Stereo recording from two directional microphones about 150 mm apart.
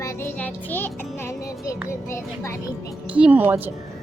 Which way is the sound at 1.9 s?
20° left (ahead or behind).